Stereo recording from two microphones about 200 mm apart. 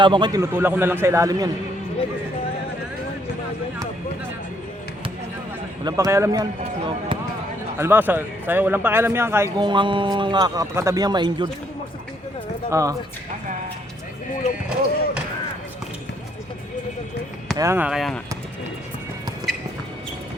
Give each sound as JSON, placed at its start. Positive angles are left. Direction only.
{"t": 0.0, "sound": "a man's voice", "side_deg": -25}
{"t": 5.8, "sound": "a man's voice", "side_deg": -15}
{"t": 7.8, "sound": "a man's voice", "side_deg": -10}
{"t": 9.6, "sound": "speech", "side_deg": -25}
{"t": 12.7, "sound": "a man's voice", "side_deg": -15}
{"t": 17.6, "sound": "speech", "side_deg": -10}
{"t": 19.5, "sound": "a sound", "side_deg": 0}